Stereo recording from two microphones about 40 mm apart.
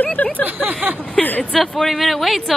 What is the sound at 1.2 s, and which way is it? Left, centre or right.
Speech, left.